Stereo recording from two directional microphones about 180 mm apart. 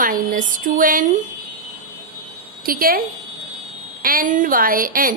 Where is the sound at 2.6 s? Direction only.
55° right (ahead or behind).